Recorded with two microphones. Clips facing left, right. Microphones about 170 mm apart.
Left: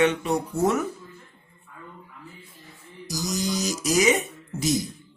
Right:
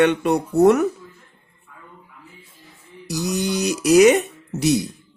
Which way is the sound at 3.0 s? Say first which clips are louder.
Right 5 dB; 65° right (ahead or behind).